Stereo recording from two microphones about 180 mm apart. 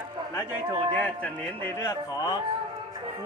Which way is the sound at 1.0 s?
10° left (ahead or behind).